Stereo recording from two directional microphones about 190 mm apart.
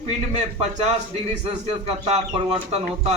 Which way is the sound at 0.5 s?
35° right (ahead or behind).